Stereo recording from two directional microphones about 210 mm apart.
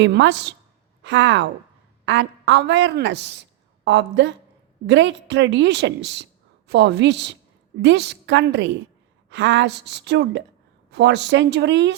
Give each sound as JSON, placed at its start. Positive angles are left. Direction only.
{"t": 0.0, "sound": "a woman's voice", "side_deg": -55}